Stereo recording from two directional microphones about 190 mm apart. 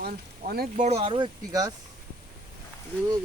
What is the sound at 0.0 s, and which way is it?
Speech, 50° right (ahead or behind).